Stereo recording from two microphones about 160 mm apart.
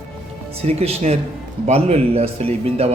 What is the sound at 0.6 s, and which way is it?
A man's voice, 40° right (ahead or behind).